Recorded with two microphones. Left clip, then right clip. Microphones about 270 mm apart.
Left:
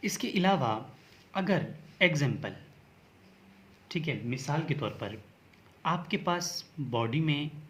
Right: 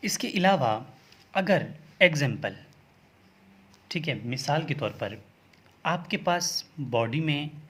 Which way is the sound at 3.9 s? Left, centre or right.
Right.